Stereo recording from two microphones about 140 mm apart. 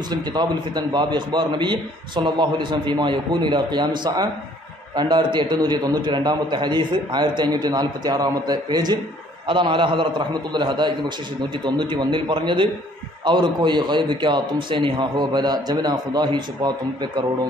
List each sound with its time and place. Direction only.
0.1 s a man's voice: 30° right (ahead or behind)